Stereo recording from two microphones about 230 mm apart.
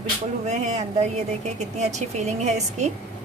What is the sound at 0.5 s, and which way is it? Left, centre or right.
A woman's voice, right.